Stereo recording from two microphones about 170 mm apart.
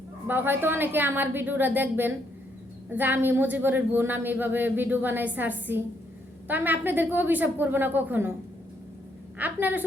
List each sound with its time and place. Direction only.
0.3 s a woman's voice: 10° right (ahead or behind)
9.4 s a woman's voice: 10° right (ahead or behind)